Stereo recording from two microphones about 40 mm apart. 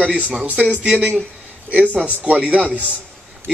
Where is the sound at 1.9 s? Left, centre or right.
Right.